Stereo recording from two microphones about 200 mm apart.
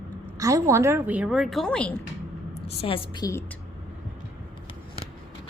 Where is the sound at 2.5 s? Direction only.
30° left (ahead or behind); by 3.5 s 15° left (ahead or behind).